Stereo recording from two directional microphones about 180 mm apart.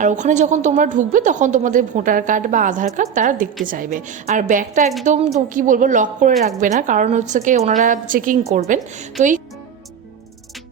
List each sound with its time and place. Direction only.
0.0 s a woman's voice: 45° right (ahead or behind)